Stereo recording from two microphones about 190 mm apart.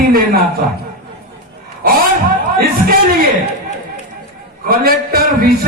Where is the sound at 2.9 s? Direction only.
50° right (ahead or behind).